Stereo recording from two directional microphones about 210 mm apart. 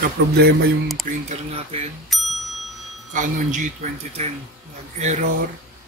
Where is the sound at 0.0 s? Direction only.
50° right (ahead or behind).